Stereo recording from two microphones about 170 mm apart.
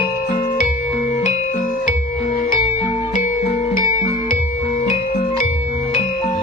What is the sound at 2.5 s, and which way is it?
Music, 35° left (ahead or behind).